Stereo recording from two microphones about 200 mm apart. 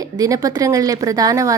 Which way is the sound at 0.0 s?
20° right (ahead or behind).